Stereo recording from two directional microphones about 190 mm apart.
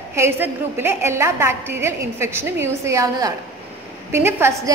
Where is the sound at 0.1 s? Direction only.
15° right (ahead or behind).